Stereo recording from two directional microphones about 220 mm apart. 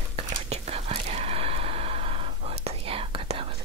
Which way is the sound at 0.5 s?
30° right (ahead or behind).